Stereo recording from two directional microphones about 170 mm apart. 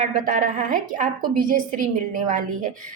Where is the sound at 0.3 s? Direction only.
55° right (ahead or behind).